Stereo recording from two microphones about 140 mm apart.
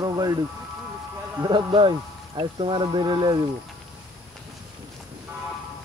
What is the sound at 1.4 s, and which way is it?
Speech, 35° right (ahead or behind).